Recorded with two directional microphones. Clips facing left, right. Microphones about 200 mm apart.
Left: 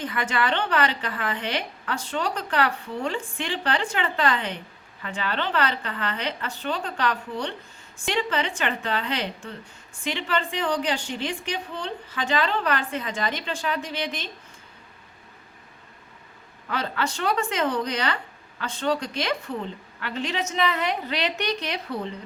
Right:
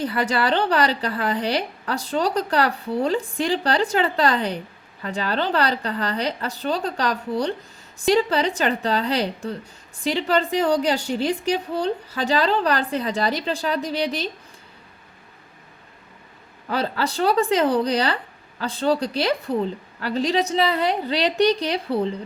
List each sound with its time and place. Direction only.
0.0 s a woman's voice: 35° right (ahead or behind)
16.6 s a woman's voice: 35° right (ahead or behind)